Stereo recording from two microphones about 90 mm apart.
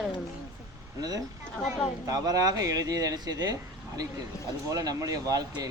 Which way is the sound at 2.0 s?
40° right (ahead or behind).